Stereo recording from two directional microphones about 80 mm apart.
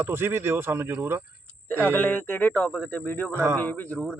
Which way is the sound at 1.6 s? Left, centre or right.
Left.